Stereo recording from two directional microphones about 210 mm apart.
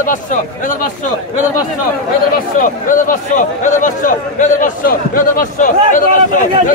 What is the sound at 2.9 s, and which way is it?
Speech, 40° left (ahead or behind).